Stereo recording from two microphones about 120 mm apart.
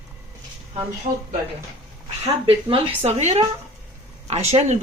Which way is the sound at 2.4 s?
50° right (ahead or behind).